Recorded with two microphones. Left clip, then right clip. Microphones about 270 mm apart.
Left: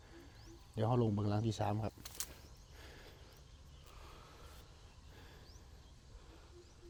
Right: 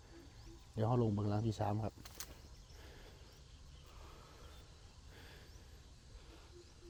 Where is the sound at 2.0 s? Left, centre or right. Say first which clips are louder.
Left 4 dB; centre.